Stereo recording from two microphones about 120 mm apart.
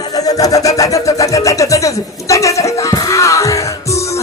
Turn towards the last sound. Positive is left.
turn(degrees=25)  # may be behind; listen again after turning